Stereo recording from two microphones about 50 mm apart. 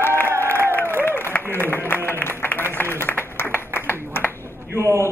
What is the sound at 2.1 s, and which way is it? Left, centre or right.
Music, left.